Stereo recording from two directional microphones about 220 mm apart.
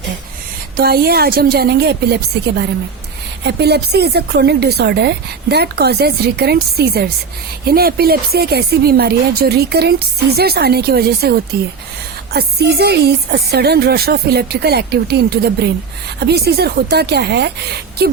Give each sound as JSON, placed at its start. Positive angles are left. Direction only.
{"t": 0.8, "sound": "a woman's voice", "side_deg": -45}